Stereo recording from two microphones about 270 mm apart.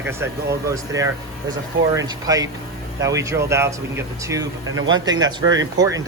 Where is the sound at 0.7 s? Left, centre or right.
Centre.